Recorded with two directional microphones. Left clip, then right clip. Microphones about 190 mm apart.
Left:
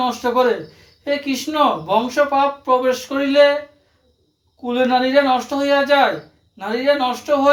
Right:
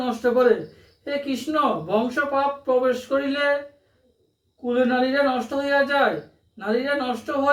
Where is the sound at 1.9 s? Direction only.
Centre (ahead or behind).